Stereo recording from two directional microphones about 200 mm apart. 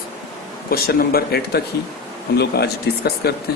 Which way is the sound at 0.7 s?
50° left (ahead or behind).